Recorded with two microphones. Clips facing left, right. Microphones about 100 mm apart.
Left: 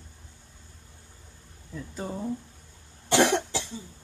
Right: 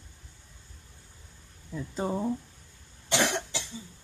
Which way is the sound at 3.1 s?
40° left (ahead or behind).